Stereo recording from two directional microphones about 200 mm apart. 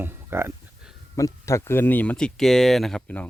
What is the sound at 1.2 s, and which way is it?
Speech, 15° left (ahead or behind).